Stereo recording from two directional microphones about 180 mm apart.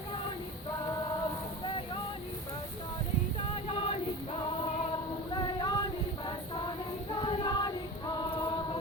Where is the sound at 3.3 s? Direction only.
30° left (ahead or behind).